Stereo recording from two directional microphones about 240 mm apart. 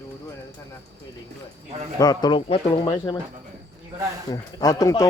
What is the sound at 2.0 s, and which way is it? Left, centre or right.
Speech, centre.